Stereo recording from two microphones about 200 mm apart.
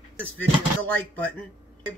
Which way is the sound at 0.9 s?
10° left (ahead or behind).